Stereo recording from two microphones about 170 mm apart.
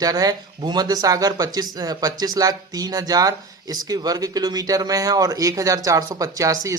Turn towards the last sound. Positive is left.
turn(degrees=-20)  # may be behind; listen again after turning